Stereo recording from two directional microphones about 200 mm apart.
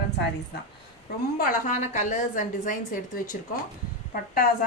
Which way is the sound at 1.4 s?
40° left (ahead or behind).